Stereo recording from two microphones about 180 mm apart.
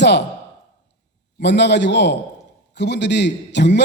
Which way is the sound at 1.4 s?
70° left (ahead or behind).